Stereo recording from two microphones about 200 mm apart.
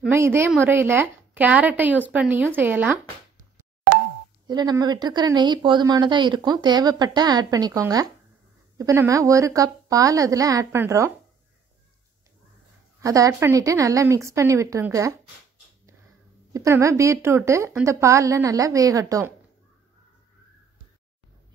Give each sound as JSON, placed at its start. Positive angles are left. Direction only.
{"t": 0.1, "sound": "a woman's voice", "side_deg": -10}
{"t": 4.5, "sound": "a woman's voice", "side_deg": -20}
{"t": 13.0, "sound": "a woman's voice", "side_deg": -15}
{"t": 16.5, "sound": "a woman's voice", "side_deg": -15}